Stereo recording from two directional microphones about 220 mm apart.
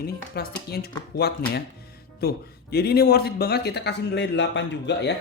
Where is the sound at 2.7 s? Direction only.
45° left (ahead or behind).